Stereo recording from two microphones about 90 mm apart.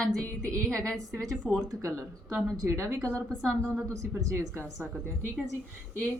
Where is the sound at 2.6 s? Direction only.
35° right (ahead or behind).